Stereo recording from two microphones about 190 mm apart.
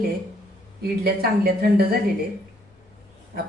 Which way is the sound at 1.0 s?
55° right (ahead or behind).